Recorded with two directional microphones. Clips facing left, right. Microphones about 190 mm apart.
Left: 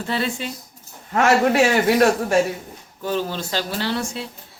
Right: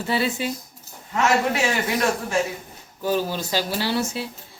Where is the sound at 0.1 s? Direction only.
5° right (ahead or behind).